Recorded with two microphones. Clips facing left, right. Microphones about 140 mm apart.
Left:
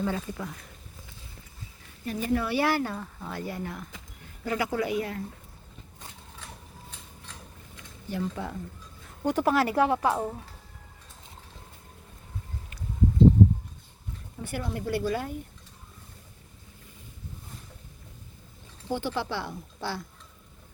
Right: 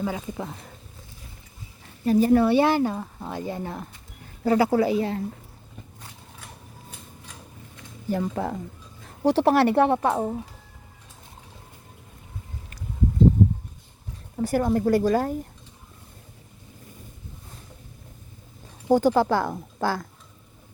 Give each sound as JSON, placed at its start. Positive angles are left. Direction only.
{"t": 0.0, "sound": "speech", "side_deg": -15}
{"t": 0.3, "sound": "speech", "side_deg": -25}
{"t": 2.0, "sound": "speech", "side_deg": -35}
{"t": 8.1, "sound": "speech", "side_deg": -45}
{"t": 9.0, "sound": "speech", "side_deg": -35}
{"t": 14.4, "sound": "speech", "side_deg": -40}
{"t": 18.9, "sound": "speech", "side_deg": -40}